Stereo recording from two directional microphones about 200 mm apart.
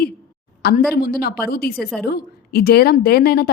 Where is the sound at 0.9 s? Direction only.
50° left (ahead or behind).